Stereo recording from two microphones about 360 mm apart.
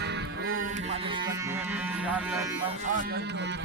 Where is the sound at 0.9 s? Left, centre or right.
Centre.